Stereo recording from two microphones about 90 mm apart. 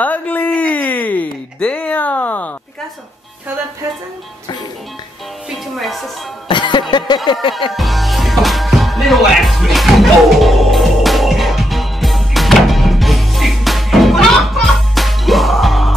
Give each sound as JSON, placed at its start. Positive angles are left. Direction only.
{"t": 0.0, "sound": "a sound", "side_deg": 20}
{"t": 5.5, "sound": "music", "side_deg": 0}
{"t": 6.5, "sound": "music", "side_deg": 60}
{"t": 7.7, "sound": "music", "side_deg": 0}